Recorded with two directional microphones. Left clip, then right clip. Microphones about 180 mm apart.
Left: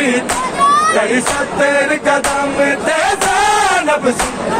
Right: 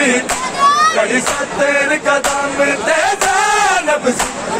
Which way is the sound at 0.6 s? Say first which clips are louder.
Even; 15° left (ahead or behind).